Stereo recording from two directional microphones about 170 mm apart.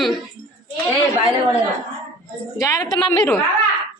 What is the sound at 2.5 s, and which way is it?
Speech, 20° left (ahead or behind).